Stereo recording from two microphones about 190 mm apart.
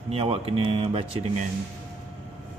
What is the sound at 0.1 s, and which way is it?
Speech, 30° right (ahead or behind).